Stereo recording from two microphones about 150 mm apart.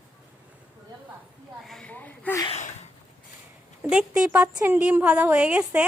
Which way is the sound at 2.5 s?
50° left (ahead or behind).